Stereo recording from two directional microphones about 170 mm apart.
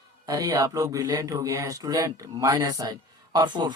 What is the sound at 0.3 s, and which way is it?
Speech, 20° right (ahead or behind).